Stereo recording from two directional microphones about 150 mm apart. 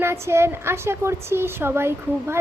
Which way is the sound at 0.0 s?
15° right (ahead or behind).